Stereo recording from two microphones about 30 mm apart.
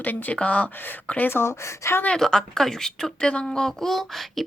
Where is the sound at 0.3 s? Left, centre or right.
Left.